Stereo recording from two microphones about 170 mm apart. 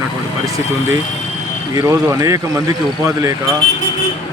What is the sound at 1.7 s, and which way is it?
A man's voice, 20° right (ahead or behind).